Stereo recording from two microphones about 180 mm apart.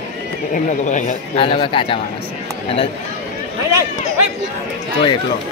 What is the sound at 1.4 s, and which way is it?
Speech, 30° left (ahead or behind).